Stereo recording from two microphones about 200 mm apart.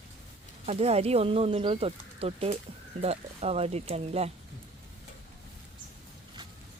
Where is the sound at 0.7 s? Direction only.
30° right (ahead or behind).